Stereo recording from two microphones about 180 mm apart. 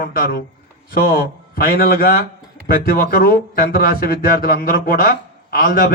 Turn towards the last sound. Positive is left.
turn(degrees=55)  # may be behind; listen again after turning